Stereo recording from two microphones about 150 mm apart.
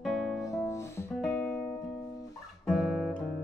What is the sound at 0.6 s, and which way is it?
Music, 20° left (ahead or behind).